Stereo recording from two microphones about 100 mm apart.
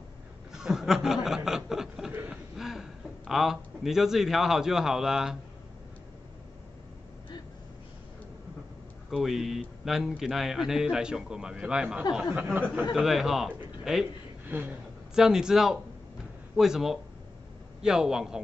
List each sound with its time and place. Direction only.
0.5 s chuckle: 5° right (ahead or behind)
9.1 s a man's voice: centre (ahead or behind)
14.4 s a sound: 20° right (ahead or behind)
15.1 s a man's voice: 5° right (ahead or behind)